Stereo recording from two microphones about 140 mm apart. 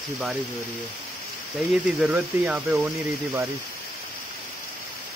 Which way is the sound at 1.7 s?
5° right (ahead or behind).